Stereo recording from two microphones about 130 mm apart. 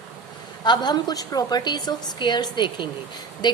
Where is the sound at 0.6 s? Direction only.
35° left (ahead or behind).